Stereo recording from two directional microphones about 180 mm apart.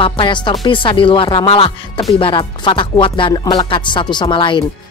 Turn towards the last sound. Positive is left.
turn(degrees=25)  # may be behind; listen again after turning